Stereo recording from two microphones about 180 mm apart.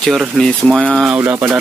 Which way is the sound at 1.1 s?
10° right (ahead or behind).